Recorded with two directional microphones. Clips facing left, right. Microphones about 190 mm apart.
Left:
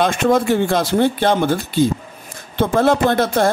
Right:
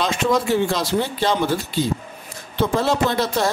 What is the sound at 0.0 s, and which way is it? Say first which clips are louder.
Speech: left 4 dB; 55° left (ahead or behind).